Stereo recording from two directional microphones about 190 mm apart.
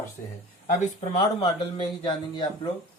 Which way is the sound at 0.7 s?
35° left (ahead or behind).